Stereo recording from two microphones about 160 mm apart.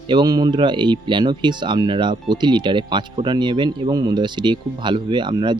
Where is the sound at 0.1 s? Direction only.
25° right (ahead or behind).